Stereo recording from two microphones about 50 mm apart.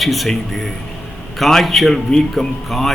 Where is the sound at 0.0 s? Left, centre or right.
Centre.